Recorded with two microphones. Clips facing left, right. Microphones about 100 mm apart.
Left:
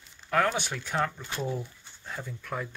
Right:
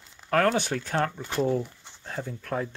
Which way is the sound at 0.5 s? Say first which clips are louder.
Right 6 dB; 40° right (ahead or behind).